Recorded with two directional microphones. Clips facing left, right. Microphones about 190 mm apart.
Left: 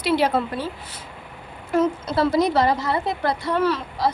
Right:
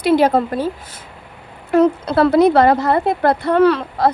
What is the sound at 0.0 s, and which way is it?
Speech, 50° right (ahead or behind).